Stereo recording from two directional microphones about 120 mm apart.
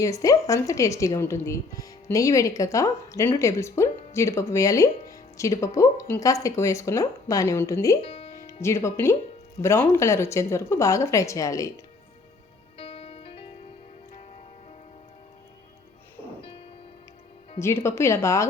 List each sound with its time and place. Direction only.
0.0 s speech: 30° left (ahead or behind)
8.0 s music: 55° left (ahead or behind)
8.6 s speech: 25° left (ahead or behind)
12.7 s music: 50° left (ahead or behind)
16.4 s music: 50° left (ahead or behind)
17.6 s speech: 20° left (ahead or behind)